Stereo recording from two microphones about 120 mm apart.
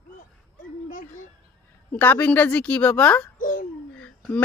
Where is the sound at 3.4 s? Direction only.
90° left.